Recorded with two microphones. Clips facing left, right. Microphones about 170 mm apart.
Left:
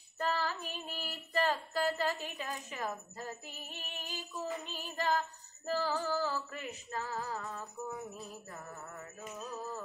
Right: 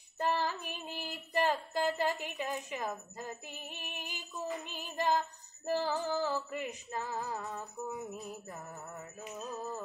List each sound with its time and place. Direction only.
0.2 s female singing: 20° right (ahead or behind)
5.7 s music: 15° right (ahead or behind)